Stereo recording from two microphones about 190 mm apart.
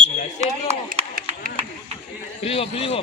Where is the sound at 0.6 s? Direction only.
40° right (ahead or behind).